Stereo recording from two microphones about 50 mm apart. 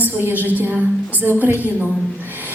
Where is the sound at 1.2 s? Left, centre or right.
Right.